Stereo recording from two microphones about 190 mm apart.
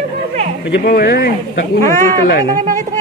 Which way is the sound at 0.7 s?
60° left (ahead or behind).